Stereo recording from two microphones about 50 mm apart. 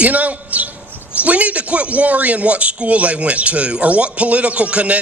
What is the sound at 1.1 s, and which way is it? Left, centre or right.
Speech, right.